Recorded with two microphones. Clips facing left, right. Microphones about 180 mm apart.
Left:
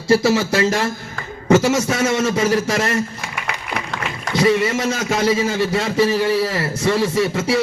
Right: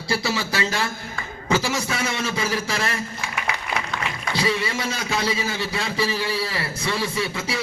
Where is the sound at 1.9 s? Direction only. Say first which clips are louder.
Left 8 dB; 40° left (ahead or behind).